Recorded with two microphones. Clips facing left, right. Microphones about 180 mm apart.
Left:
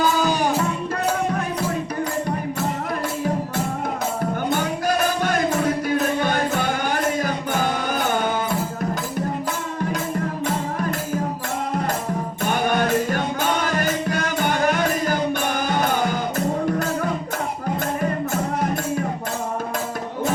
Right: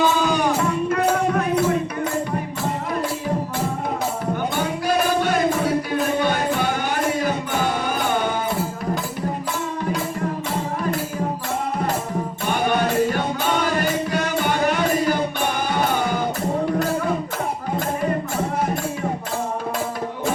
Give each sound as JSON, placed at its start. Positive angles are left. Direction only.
{"t": 0.0, "sound": "music", "side_deg": 35}
{"t": 4.5, "sound": "music", "side_deg": 45}
{"t": 12.5, "sound": "music", "side_deg": 45}